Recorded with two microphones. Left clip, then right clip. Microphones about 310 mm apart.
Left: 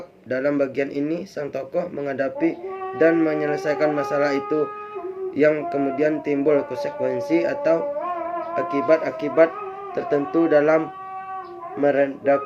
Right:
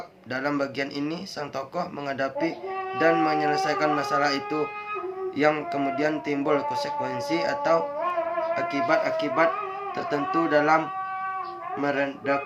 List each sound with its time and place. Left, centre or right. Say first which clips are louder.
0.3 s speech: left 6 dB; centre
11.8 s speech: left 8 dB; centre